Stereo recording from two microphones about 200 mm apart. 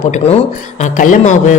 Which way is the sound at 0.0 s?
35° left (ahead or behind).